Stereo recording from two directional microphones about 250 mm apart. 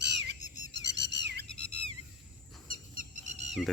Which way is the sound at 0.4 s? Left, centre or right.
Left.